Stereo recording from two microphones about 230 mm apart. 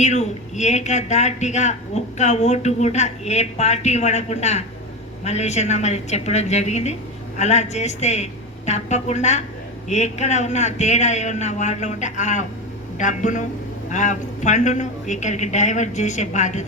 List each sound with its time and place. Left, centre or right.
0.0 s a woman's voice: left